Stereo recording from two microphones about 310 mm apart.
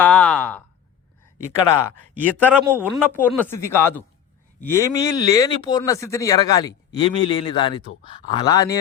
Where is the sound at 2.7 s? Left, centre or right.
Centre.